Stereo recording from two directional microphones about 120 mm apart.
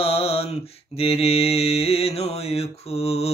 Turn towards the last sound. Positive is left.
turn(degrees=55)  # may be behind; listen again after turning